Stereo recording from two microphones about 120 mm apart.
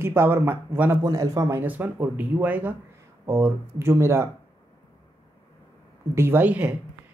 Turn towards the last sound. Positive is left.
turn(degrees=-15)  # may be behind; listen again after turning